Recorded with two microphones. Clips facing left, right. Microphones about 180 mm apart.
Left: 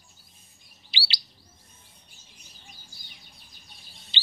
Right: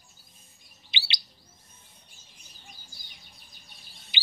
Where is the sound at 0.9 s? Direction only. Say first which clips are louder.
Even; 20° right (ahead or behind).